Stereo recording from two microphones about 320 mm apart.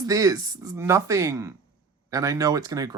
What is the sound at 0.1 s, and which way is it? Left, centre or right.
Speech, centre.